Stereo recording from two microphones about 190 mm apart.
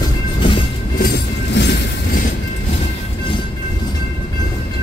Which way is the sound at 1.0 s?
60° left (ahead or behind).